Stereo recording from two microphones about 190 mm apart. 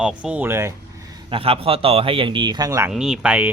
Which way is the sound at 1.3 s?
30° right (ahead or behind).